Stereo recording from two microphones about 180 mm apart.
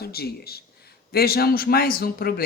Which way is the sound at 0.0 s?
60° left (ahead or behind).